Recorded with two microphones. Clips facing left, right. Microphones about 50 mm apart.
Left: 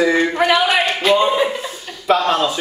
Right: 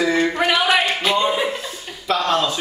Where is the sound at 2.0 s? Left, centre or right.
Centre.